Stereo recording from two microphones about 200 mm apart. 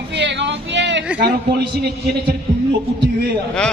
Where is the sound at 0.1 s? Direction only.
60° right (ahead or behind).